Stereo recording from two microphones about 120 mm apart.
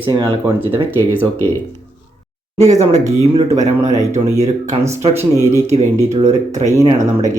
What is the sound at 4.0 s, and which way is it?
Speech, 75° right (ahead or behind).